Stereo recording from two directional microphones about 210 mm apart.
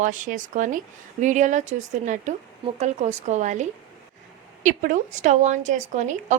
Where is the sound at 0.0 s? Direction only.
40° right (ahead or behind).